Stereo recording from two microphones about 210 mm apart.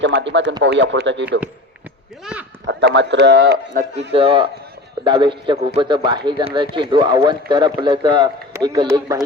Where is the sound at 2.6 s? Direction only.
55° right (ahead or behind).